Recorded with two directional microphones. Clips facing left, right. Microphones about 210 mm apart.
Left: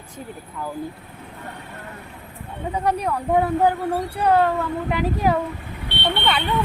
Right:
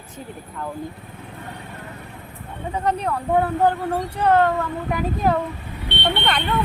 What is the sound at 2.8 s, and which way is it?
Speech, 10° left (ahead or behind).